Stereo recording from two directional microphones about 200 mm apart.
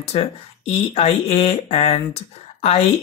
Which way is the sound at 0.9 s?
30° left (ahead or behind).